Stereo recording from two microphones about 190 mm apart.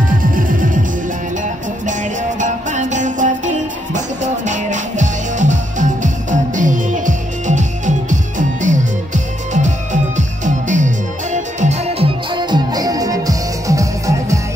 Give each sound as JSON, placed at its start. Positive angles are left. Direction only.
{"t": 0.2, "sound": "music", "side_deg": -45}
{"t": 2.7, "sound": "music", "side_deg": -40}